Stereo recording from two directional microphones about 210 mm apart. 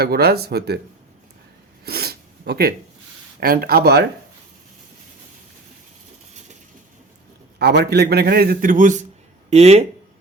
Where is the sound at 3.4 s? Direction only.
45° right (ahead or behind).